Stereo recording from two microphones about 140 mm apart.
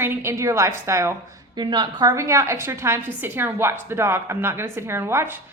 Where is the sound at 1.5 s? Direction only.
30° right (ahead or behind); by 5.4 s 15° right (ahead or behind).